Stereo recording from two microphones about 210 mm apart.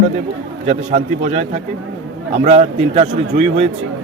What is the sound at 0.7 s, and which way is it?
Speech, 35° right (ahead or behind).